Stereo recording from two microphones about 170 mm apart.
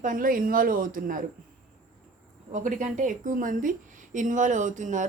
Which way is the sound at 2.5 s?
50° right (ahead or behind).